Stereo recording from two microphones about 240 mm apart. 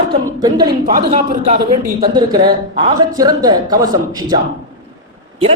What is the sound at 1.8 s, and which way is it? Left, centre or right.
A man's voice, centre.